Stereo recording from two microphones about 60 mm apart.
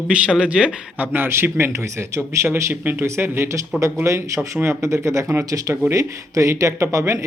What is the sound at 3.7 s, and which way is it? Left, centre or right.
Speech, right.